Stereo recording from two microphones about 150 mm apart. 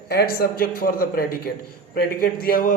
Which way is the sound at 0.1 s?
90° left.